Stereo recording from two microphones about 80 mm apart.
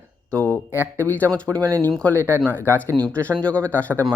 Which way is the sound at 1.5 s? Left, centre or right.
Right.